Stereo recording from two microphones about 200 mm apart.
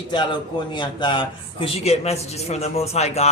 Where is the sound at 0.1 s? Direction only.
25° left (ahead or behind).